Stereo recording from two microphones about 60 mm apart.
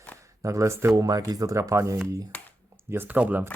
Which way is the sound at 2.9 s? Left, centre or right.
Right.